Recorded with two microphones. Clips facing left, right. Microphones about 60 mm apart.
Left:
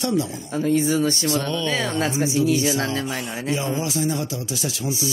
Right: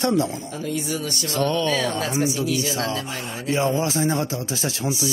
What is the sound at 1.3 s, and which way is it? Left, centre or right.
Speech, right.